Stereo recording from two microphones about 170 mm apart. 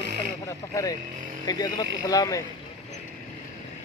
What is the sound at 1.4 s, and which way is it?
Speech, 25° left (ahead or behind).